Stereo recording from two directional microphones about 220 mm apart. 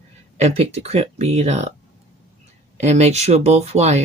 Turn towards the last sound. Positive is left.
turn(degrees=-30)  # may be behind; listen again after turning